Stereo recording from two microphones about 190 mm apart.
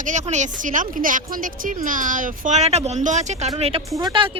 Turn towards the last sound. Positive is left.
turn(degrees=-20)  # may be behind; listen again after turning